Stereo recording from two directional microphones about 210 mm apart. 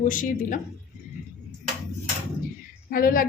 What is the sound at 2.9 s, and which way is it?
Speech, 45° left (ahead or behind).